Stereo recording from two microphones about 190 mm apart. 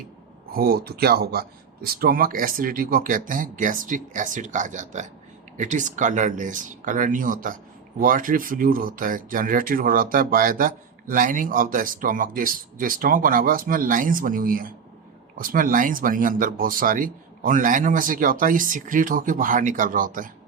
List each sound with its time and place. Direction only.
0.5 s speech: 55° right (ahead or behind)